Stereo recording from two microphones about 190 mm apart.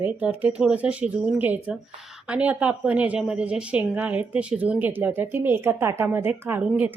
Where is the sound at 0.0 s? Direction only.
10° right (ahead or behind).